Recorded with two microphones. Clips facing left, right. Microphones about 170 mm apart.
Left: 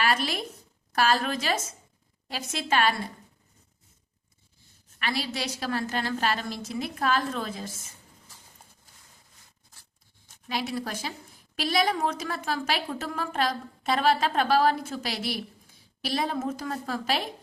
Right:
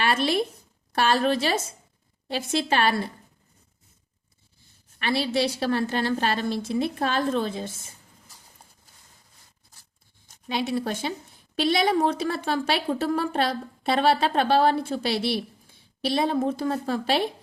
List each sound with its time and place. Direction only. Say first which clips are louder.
0.0 s a woman's voice: right 4 dB; 30° right (ahead or behind)
4.9 s a woman's voice: right 7 dB; 30° right (ahead or behind)
10.5 s a woman's voice: right 5 dB; 25° right (ahead or behind)